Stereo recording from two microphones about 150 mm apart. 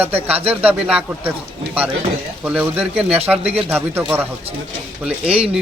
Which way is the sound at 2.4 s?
10° right (ahead or behind).